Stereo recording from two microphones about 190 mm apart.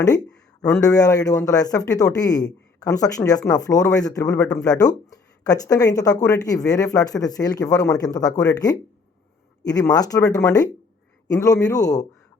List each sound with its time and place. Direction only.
0.6 s speech: 20° left (ahead or behind)